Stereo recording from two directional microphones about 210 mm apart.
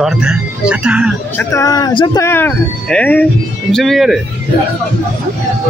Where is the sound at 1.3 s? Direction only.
15° left (ahead or behind).